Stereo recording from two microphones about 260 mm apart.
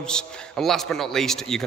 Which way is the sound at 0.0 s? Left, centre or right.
Centre.